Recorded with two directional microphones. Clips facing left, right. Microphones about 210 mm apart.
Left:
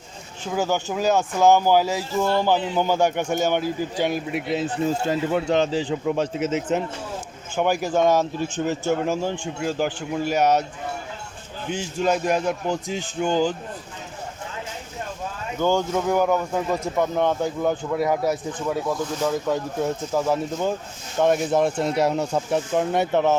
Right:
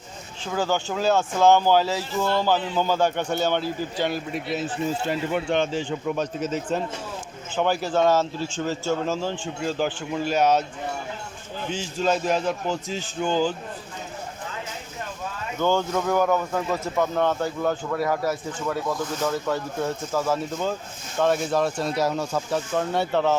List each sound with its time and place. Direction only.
0.4 s speech: 15° left (ahead or behind)
4.9 s speech: 40° left (ahead or behind)
6.4 s speech: 20° left (ahead or behind)
11.7 s speech: 10° left (ahead or behind)
15.5 s speech: 10° left (ahead or behind)